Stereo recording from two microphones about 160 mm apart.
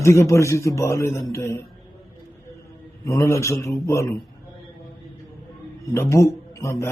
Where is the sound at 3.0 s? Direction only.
20° left (ahead or behind).